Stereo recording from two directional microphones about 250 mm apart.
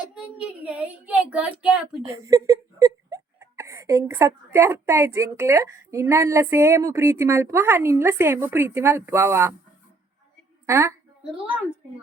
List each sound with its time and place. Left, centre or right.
0.1 s speech: centre
10.7 s a woman's voice: centre